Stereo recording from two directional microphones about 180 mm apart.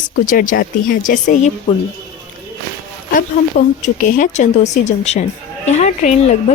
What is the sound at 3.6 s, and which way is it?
Speech, 55° left (ahead or behind).